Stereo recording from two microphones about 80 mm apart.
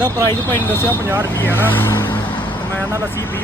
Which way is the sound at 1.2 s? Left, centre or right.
Left.